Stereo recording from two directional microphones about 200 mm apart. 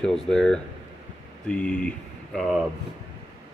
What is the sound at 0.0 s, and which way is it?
Speech, centre (ahead or behind).